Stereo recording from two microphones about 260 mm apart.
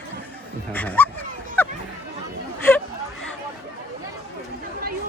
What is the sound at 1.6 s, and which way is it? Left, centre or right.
Chatter, centre.